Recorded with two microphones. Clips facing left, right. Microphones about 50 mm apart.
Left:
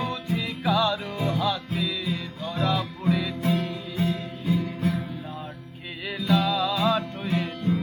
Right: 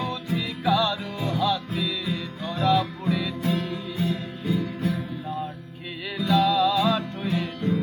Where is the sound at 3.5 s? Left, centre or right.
Left.